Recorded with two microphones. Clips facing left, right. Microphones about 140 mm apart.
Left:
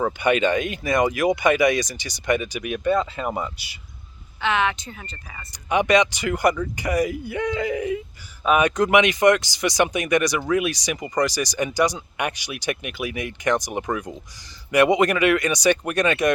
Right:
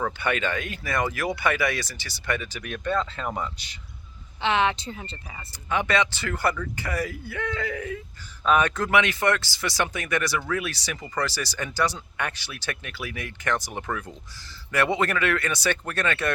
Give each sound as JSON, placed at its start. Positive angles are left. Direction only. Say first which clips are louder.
{"t": 0.0, "sound": "speech", "louder": "left 7 dB", "side_deg": 20}
{"t": 4.4, "sound": "speech", "louder": "left 1 dB", "side_deg": -30}
{"t": 5.5, "sound": "speech", "louder": "left 6 dB", "side_deg": 15}